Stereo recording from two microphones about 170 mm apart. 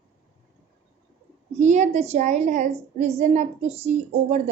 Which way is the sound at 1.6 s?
45° right (ahead or behind).